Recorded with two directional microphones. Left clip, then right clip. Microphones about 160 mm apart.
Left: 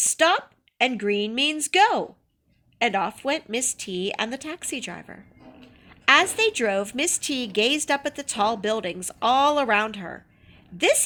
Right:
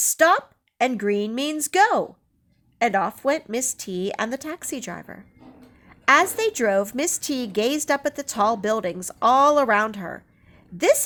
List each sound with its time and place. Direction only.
0.0 s a woman's voice: 60° right (ahead or behind)
6.1 s a woman's voice: 55° right (ahead or behind)